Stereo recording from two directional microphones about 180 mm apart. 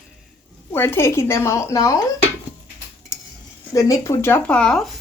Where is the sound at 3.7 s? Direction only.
15° left (ahead or behind); by 5.0 s centre (ahead or behind).